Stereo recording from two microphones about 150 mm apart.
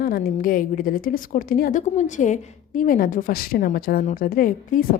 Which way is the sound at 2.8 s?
70° left (ahead or behind).